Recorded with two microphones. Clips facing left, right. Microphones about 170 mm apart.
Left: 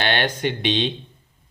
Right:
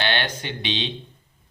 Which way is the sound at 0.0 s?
50° left (ahead or behind).